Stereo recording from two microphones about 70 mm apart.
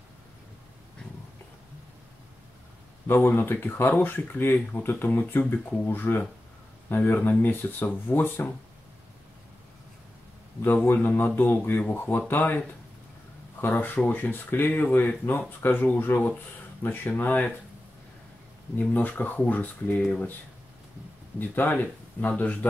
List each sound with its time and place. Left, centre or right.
3.1 s speech: left
10.6 s speech: left
18.8 s speech: left
21.4 s speech: left